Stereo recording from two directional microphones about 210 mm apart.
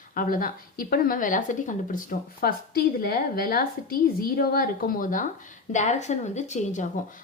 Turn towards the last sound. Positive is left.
turn(degrees=35)  # may be behind; listen again after turning